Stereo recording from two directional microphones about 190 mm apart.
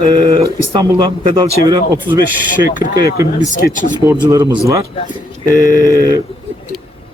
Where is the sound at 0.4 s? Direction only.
20° right (ahead or behind).